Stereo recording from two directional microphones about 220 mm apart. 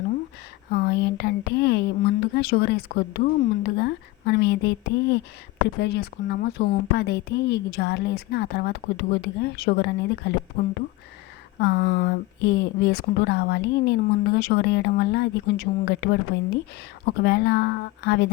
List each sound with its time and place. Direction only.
0.7 s speech: 45° left (ahead or behind)
11.6 s speech: 50° left (ahead or behind)